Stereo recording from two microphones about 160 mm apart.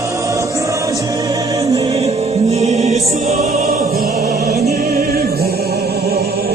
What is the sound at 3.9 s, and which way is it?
Music, 75° right (ahead or behind).